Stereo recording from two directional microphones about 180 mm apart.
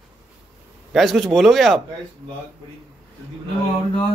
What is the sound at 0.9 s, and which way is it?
Speech, centre (ahead or behind).